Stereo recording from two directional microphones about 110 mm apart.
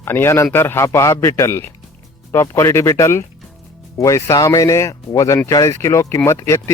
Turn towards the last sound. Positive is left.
turn(degrees=25)  # may be behind; listen again after turning